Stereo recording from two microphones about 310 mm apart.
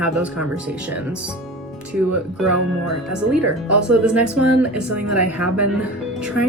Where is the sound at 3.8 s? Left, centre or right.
Centre.